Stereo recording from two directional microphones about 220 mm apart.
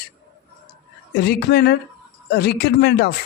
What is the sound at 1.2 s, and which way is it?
Speech, 45° left (ahead or behind).